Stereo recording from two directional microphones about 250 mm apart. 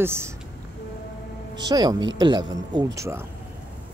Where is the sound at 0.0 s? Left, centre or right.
Centre.